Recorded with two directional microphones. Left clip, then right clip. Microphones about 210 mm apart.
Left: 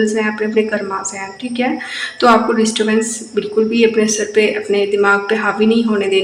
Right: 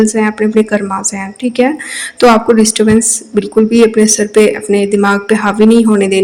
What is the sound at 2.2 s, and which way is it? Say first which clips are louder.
Speech: right 4 dB; 50° right (ahead or behind).